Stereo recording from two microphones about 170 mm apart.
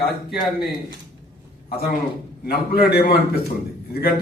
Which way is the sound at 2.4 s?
65° left (ahead or behind).